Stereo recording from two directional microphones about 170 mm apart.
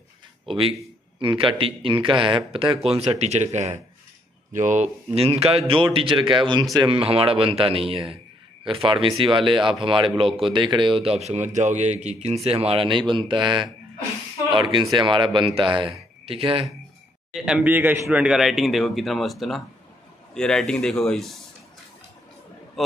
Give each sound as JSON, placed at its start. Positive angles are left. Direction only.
{"t": 0.5, "sound": "a man's voice", "side_deg": -35}
{"t": 6.9, "sound": "a man's voice", "side_deg": -35}
{"t": 17.3, "sound": "speech", "side_deg": -5}